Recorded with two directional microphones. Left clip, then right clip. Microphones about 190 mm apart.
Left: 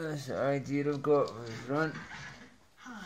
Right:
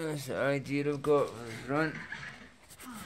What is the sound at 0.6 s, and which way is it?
Speech, 15° right (ahead or behind).